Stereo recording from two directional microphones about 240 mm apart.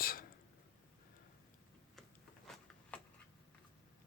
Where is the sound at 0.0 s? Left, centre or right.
Left.